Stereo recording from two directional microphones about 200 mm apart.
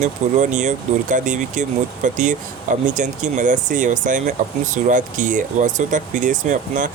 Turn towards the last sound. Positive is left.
turn(degrees=-40)  # may be behind; listen again after turning